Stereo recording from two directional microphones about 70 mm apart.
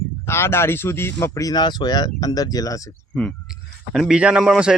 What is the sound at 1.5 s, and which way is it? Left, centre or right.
Speech, left.